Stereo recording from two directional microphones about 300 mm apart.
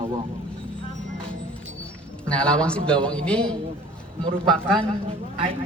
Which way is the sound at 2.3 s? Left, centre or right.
Centre.